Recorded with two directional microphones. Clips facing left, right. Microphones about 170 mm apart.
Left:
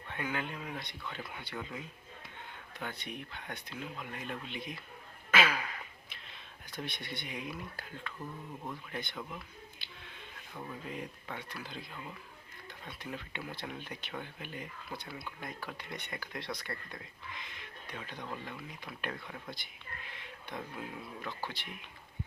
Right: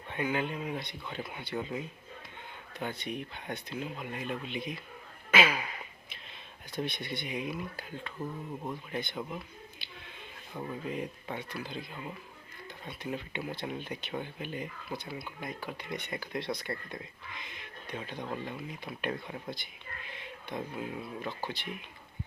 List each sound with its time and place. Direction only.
0.1 s speech: 20° right (ahead or behind)
2.8 s speech: 20° right (ahead or behind)
5.3 s a sound: 15° right (ahead or behind)
6.7 s speech: 20° right (ahead or behind)
10.5 s speech: 20° right (ahead or behind)
12.9 s speech: 20° right (ahead or behind)